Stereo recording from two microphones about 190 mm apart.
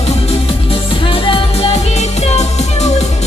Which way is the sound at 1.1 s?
25° left (ahead or behind).